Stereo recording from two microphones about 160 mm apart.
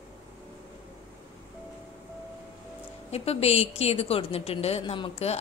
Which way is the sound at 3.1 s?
40° left (ahead or behind).